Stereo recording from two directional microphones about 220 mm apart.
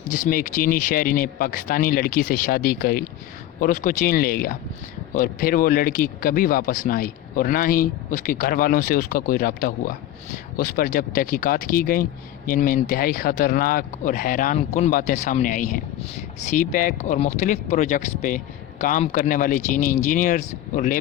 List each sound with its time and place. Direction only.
0.1 s speech: 35° left (ahead or behind)